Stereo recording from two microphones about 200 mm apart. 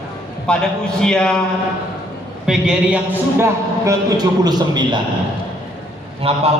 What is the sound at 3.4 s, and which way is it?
A man's voice, 15° right (ahead or behind).